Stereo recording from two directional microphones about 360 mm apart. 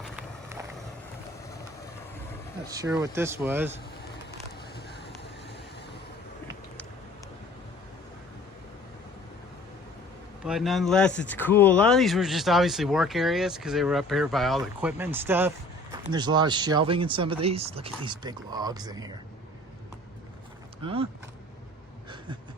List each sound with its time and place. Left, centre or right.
2.7 s speech: centre
10.4 s speech: centre
20.8 s speech: centre